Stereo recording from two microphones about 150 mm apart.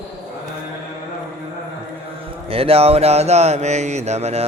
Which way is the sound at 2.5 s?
40° right (ahead or behind).